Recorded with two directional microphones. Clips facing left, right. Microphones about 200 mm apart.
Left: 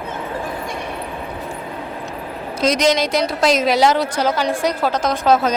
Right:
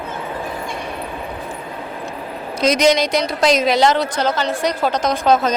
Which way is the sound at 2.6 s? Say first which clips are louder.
Right 2 dB; centre (ahead or behind).